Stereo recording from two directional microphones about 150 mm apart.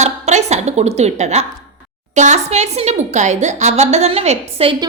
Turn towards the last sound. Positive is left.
turn(degrees=-45)  # may be behind; listen again after turning